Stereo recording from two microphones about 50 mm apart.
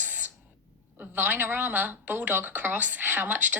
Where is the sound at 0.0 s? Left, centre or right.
Right.